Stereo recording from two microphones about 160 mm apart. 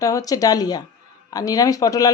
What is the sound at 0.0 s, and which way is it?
Speech, 20° left (ahead or behind).